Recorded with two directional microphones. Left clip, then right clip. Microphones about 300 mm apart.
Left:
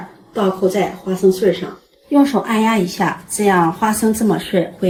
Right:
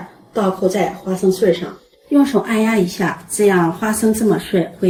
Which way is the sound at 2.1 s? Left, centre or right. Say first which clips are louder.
Even; centre.